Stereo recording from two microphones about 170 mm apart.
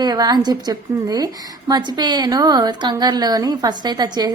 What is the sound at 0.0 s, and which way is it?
A woman's voice, 25° right (ahead or behind).